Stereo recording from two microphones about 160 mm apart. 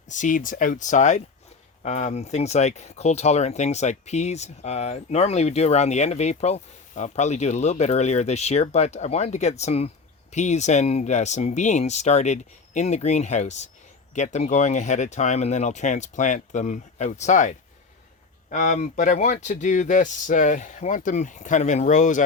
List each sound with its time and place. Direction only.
0.1 s speech: 55° left (ahead or behind)